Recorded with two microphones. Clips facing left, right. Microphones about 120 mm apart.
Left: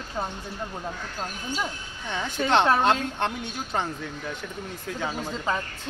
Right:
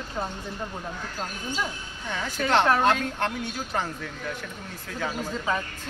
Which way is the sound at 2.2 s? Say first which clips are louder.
Left 1 dB; 20° left (ahead or behind).